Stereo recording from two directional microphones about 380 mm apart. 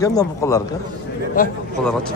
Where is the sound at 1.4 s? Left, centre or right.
Left.